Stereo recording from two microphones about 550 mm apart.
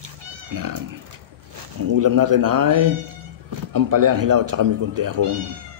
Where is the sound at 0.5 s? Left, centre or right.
Right.